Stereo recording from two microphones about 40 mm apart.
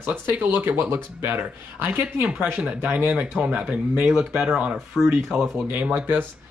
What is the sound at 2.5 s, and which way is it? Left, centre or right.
Speech, right.